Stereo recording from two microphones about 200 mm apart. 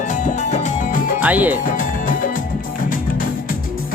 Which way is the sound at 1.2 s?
10° right (ahead or behind).